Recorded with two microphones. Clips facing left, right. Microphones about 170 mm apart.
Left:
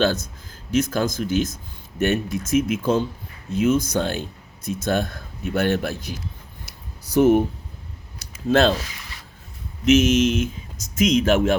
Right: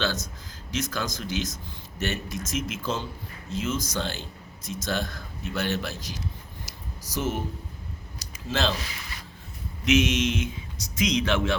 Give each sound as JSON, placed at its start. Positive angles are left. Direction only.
{"t": 0.0, "sound": "speech", "side_deg": 55}
{"t": 6.7, "sound": "a sound", "side_deg": 60}
{"t": 10.0, "sound": "speech", "side_deg": 45}